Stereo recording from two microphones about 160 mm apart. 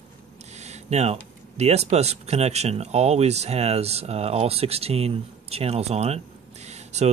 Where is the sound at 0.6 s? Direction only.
45° right (ahead or behind).